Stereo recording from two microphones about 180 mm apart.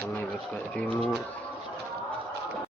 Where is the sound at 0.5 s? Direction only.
5° left (ahead or behind).